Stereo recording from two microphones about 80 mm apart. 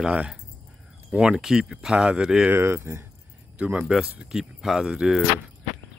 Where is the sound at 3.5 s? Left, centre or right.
Centre.